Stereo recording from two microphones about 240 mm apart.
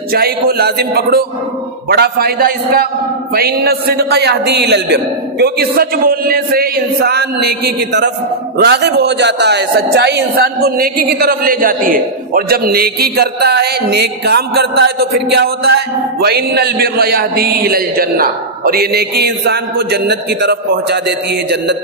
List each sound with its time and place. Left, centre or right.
0.1 s a man's voice: right